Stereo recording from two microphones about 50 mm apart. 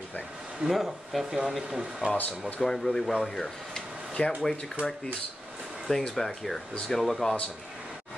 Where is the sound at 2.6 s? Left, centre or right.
Centre.